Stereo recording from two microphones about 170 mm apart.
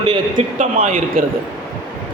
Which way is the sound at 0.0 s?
30° right (ahead or behind).